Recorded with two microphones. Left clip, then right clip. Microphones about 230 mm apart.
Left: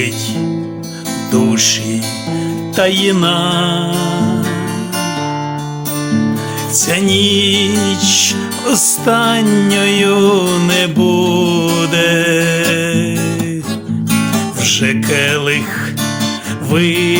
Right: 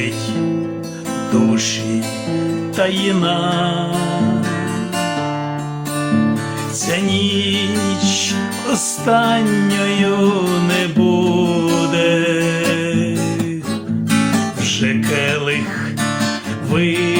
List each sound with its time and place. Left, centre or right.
1.3 s music: left
6.1 s music: left
6.8 s music: left
14.6 s music: left
16.7 s music: left